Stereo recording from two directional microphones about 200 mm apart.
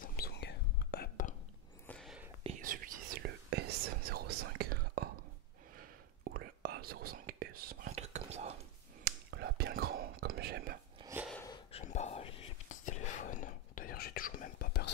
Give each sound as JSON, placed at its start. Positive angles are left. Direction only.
{"t": 0.0, "sound": "whispering", "side_deg": 50}
{"t": 1.9, "sound": "whispering", "side_deg": 0}
{"t": 2.6, "sound": "whispering", "side_deg": -45}
{"t": 3.4, "sound": "whispering", "side_deg": -55}
{"t": 7.9, "sound": "whispering", "side_deg": -35}
{"t": 9.0, "sound": "whispering", "side_deg": -50}
{"t": 11.0, "sound": "a sound", "side_deg": -15}
{"t": 11.7, "sound": "whispering", "side_deg": 35}